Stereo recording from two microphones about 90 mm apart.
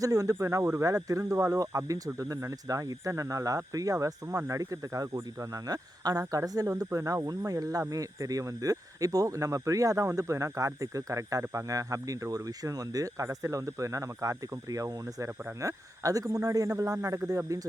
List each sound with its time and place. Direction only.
0.0 s speech: 40° right (ahead or behind)